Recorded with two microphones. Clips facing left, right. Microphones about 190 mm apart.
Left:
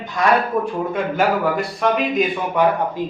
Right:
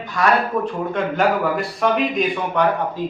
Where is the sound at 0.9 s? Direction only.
Centre (ahead or behind).